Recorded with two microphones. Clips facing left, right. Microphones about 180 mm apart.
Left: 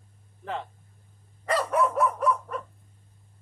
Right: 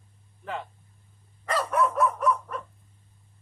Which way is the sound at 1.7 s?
30° left (ahead or behind).